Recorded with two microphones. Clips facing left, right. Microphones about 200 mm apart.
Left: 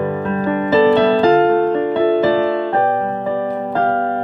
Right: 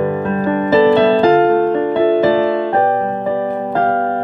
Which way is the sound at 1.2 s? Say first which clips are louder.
Right 1 dB; 50° right (ahead or behind).